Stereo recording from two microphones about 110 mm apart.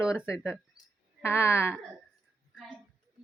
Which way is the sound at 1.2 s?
25° left (ahead or behind).